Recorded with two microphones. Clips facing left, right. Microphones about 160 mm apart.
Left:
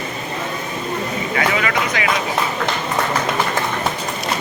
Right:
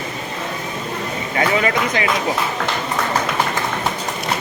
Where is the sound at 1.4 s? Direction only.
35° right (ahead or behind).